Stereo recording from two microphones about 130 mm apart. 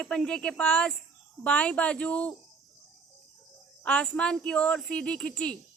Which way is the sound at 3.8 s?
5° left (ahead or behind).